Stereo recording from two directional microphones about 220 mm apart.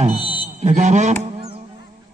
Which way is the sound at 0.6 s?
30° right (ahead or behind).